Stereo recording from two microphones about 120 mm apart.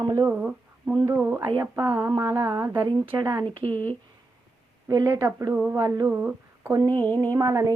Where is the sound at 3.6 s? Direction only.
60° right (ahead or behind).